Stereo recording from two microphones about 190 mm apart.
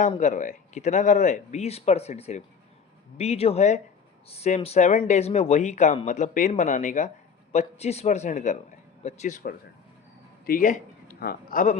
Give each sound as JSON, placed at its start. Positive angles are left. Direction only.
{"t": 0.2, "sound": "a man's voice", "side_deg": 40}